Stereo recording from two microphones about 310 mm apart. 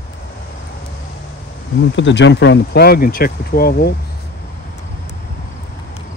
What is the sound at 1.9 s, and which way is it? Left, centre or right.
Speech, left.